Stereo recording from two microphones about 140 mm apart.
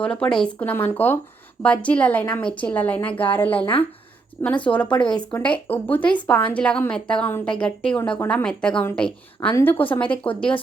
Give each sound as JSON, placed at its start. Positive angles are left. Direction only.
{"t": 0.0, "sound": "a woman's voice", "side_deg": 10}
{"t": 3.6, "sound": "speech", "side_deg": 40}
{"t": 4.4, "sound": "a woman's voice", "side_deg": 10}